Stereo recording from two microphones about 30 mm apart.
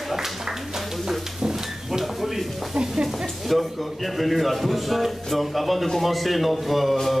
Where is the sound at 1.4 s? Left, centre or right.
Centre.